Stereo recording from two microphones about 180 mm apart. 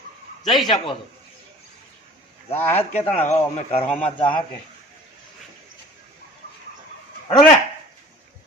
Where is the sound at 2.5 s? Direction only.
35° left (ahead or behind).